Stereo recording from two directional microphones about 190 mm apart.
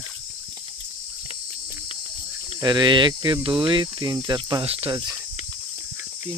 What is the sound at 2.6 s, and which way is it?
Cricket, 25° right (ahead or behind).